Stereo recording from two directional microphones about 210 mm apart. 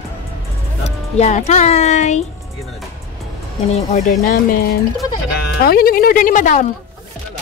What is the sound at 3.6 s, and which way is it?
Speech, 35° left (ahead or behind).